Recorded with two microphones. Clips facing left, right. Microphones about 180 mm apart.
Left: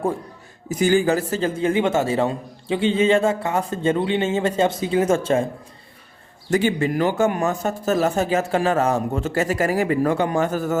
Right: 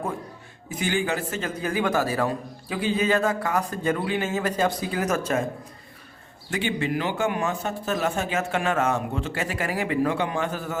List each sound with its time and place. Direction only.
0.7 s a man's voice: 40° left (ahead or behind)
6.5 s a man's voice: 45° left (ahead or behind)